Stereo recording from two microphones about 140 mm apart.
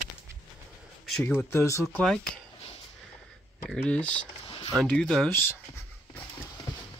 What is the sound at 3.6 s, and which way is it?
Speech, 10° left (ahead or behind).